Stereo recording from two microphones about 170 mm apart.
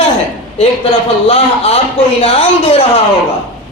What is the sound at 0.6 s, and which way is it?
A man's voice, 35° left (ahead or behind).